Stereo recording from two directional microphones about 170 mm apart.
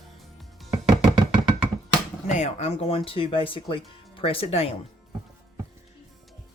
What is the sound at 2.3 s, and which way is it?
Speech, 40° left (ahead or behind).